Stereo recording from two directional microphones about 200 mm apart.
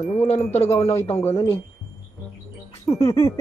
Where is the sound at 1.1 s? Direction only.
10° left (ahead or behind).